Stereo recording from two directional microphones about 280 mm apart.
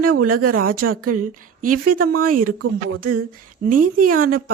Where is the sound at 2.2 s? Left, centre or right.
Right.